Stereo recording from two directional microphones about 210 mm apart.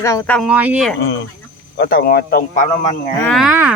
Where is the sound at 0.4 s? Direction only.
5° right (ahead or behind).